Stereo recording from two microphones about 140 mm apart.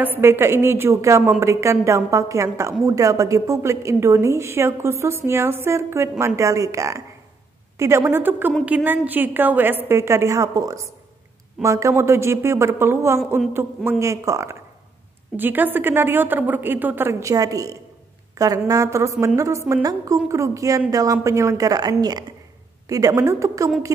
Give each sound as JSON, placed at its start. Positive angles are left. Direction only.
{"t": 0.0, "sound": "a woman's voice", "side_deg": -15}